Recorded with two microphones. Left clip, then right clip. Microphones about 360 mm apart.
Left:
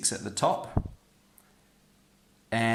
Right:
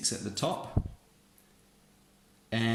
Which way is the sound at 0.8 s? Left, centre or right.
Left.